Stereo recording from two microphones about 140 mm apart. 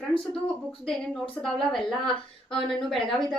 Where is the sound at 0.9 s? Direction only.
5° left (ahead or behind).